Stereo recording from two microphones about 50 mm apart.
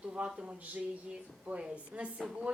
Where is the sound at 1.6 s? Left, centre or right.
Right.